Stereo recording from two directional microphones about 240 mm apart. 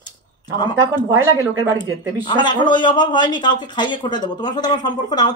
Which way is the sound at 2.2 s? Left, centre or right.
Centre.